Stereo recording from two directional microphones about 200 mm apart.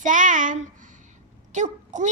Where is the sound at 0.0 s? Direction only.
40° right (ahead or behind).